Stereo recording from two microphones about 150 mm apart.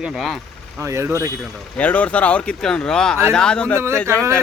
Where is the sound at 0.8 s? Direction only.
20° right (ahead or behind).